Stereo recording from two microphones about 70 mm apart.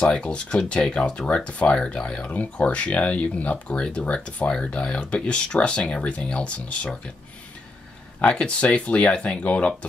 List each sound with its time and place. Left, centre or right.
0.0 s speech: centre
8.2 s speech: centre